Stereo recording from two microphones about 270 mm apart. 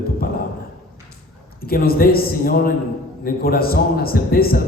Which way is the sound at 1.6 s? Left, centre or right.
Left.